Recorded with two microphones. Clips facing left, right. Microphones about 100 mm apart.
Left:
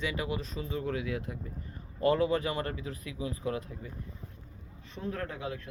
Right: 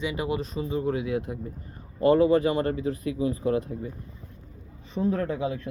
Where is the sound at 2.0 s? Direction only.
30° right (ahead or behind).